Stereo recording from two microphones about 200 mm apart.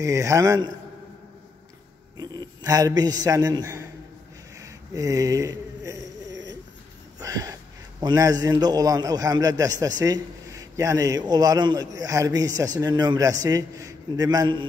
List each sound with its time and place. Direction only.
0.0 s a man's voice: 15° right (ahead or behind)
2.1 s a man's voice: 20° right (ahead or behind)
4.6 s a sound: 15° right (ahead or behind)
8.0 s a man's voice: 20° right (ahead or behind)